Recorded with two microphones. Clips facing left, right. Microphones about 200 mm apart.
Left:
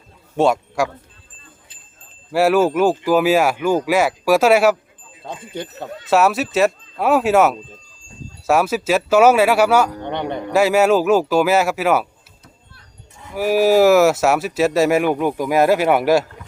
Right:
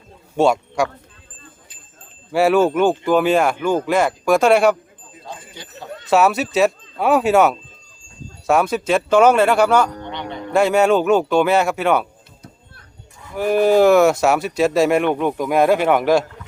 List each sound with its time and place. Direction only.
0.3 s a man's voice: centre (ahead or behind)
2.3 s speech: centre (ahead or behind)
5.2 s speech: 55° left (ahead or behind)
6.1 s speech: centre (ahead or behind)
10.1 s music: 55° left (ahead or behind)
10.5 s speech: 5° left (ahead or behind)
13.3 s speech: 5° left (ahead or behind)